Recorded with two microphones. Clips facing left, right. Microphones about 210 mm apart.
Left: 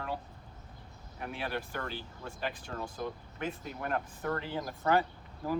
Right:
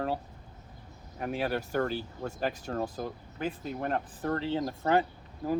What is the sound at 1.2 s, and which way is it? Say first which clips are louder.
Speech: right 6 dB; 40° right (ahead or behind).